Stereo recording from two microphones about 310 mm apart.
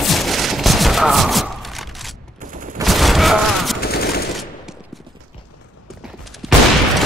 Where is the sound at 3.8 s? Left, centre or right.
Left.